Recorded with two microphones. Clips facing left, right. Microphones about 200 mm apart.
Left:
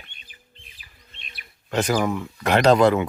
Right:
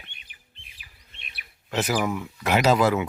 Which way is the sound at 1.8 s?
5° right (ahead or behind).